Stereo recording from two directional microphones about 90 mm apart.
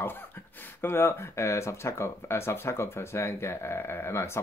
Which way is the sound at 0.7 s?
25° left (ahead or behind).